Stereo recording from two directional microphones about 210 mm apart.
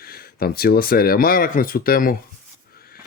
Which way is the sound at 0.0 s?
45° left (ahead or behind).